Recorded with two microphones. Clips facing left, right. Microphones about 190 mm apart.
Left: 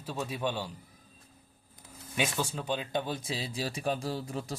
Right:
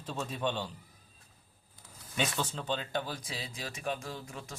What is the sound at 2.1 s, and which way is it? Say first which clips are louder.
Speech: left 2 dB; 10° left (ahead or behind).